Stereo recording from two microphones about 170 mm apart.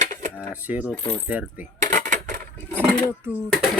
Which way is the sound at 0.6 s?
10° right (ahead or behind).